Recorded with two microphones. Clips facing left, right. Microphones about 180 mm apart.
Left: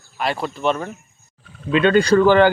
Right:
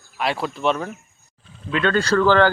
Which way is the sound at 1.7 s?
20° left (ahead or behind).